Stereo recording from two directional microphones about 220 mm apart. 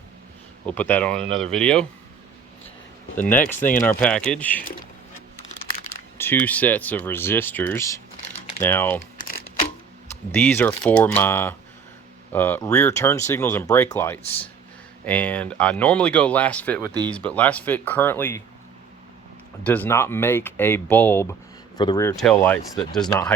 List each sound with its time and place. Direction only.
0.6 s speech: 5° left (ahead or behind)
3.2 s speech: 10° left (ahead or behind)
6.1 s speech: 10° left (ahead or behind)
10.3 s speech: 10° left (ahead or behind)
19.6 s speech: 5° left (ahead or behind)
22.1 s speech: centre (ahead or behind)